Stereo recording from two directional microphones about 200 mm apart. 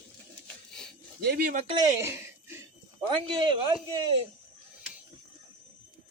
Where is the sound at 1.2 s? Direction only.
55° right (ahead or behind).